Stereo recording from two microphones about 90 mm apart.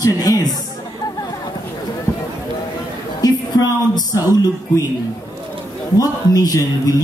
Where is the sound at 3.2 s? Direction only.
45° left (ahead or behind).